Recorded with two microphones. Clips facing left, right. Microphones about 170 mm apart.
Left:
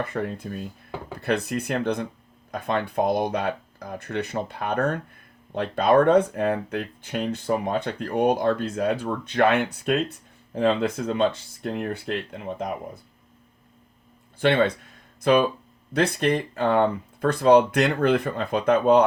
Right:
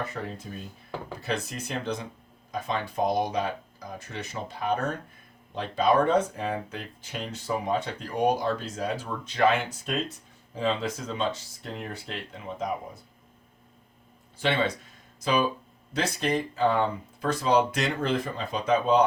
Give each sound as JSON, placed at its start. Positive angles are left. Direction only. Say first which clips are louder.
{"t": 0.0, "sound": "speech", "louder": "left 6 dB", "side_deg": 60}
{"t": 14.3, "sound": "speech", "louder": "left 6 dB", "side_deg": 55}